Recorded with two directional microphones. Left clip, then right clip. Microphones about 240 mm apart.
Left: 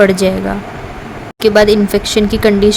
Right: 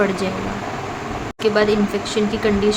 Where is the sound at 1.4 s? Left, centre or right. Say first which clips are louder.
Left 8 dB; left.